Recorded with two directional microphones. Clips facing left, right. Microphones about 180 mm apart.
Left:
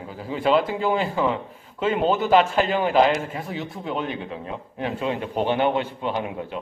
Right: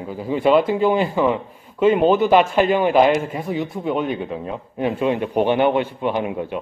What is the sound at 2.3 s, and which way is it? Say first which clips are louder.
A man's voice: right 3 dB; 15° right (ahead or behind).